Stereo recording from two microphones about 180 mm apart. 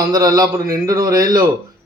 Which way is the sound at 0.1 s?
20° right (ahead or behind).